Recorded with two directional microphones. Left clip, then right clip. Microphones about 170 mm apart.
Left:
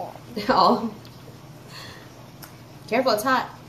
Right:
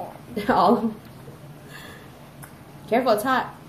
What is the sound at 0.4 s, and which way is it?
Speech, 15° right (ahead or behind).